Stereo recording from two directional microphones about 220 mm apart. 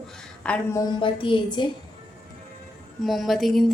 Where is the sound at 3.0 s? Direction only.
Centre (ahead or behind).